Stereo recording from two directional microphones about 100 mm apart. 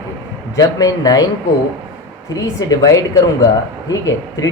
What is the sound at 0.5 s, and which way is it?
Speech, 35° left (ahead or behind).